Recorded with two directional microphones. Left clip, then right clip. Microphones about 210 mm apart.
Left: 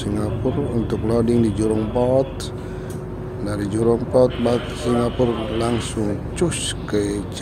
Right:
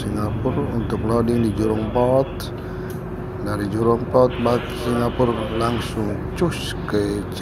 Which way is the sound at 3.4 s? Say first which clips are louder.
Even; 20° left (ahead or behind).